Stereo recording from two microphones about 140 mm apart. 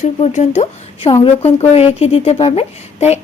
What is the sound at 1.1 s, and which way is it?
A woman's voice, 45° left (ahead or behind).